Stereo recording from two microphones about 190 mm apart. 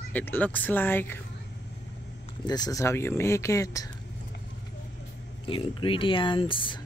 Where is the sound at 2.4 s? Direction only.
20° left (ahead or behind).